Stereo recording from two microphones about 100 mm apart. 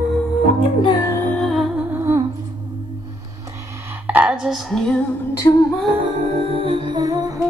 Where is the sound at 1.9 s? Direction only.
30° right (ahead or behind).